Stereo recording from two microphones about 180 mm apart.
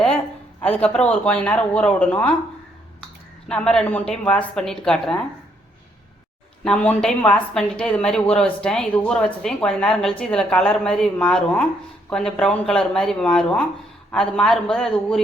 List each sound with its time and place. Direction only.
0.8 s speech: 5° left (ahead or behind)
3.5 s a woman's voice: 5° left (ahead or behind)
6.7 s a woman's voice: 5° left (ahead or behind)